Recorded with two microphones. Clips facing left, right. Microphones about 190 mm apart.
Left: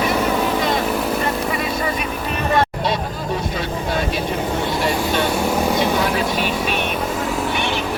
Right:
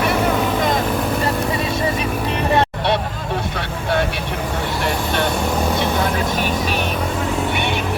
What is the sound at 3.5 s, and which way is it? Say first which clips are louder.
Vehicle: right 1 dB; 65° right (ahead or behind).